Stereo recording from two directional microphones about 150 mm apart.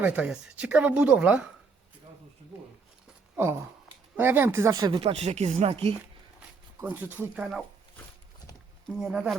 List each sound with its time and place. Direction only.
0.0 s speech: 10° right (ahead or behind)
3.3 s speech: 15° right (ahead or behind)
4.9 s speech: 45° right (ahead or behind)
6.7 s speech: 15° right (ahead or behind)
8.9 s speech: 5° right (ahead or behind)